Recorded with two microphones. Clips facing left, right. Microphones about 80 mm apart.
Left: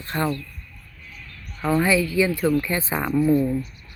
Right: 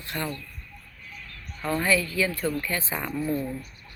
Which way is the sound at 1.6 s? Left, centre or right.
Centre.